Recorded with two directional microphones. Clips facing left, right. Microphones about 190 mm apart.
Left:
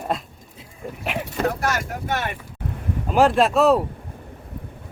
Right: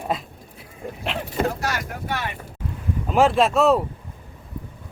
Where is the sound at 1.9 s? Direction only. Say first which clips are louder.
Left 2 dB; 50° left (ahead or behind).